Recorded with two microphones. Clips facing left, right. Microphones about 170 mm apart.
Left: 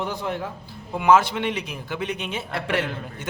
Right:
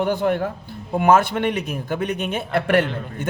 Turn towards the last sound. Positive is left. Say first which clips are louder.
# right 7 dB
turn(degrees=-55)  # may be behind; listen again after turning